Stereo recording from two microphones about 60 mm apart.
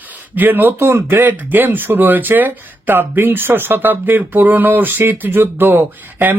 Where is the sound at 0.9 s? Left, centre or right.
Right.